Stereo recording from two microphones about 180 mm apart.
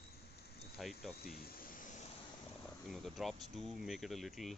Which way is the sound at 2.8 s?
Centre (ahead or behind).